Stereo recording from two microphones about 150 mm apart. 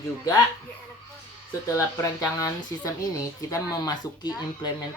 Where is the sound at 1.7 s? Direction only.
20° left (ahead or behind).